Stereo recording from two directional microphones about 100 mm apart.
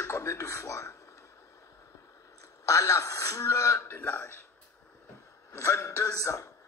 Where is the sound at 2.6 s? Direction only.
30° left (ahead or behind).